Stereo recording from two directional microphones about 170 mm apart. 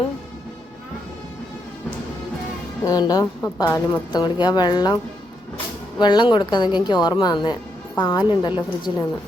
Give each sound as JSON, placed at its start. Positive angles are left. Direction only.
{"t": 2.8, "sound": "speech", "side_deg": 20}
{"t": 6.0, "sound": "speech", "side_deg": 25}